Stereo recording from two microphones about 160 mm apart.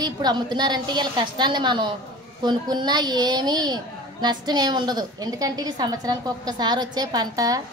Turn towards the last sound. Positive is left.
turn(degrees=-25)  # may be behind; listen again after turning